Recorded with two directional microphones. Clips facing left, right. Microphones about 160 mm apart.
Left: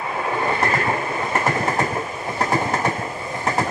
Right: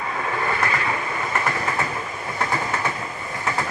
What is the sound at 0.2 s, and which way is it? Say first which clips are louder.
Train: left 3 dB; 25° left (ahead or behind).